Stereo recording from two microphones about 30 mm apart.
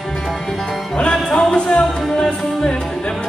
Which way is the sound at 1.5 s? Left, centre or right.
Left.